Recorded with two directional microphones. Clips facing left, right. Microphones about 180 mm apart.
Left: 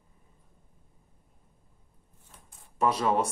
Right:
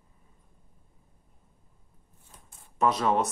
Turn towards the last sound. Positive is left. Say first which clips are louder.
# right 1 dB
turn(degrees=10)  # may be behind; listen again after turning